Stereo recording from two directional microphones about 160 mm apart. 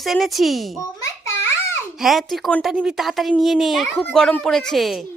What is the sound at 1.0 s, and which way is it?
Babbling, 15° left (ahead or behind).